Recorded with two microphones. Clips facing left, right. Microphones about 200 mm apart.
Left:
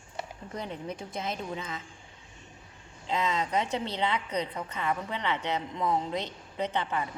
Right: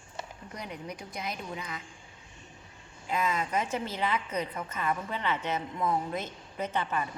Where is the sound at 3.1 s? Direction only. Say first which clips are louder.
Left 1 dB; 20° left (ahead or behind).